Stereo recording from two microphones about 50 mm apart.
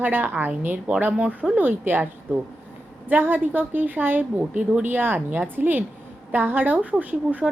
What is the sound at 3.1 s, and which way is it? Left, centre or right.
A woman's voice, right.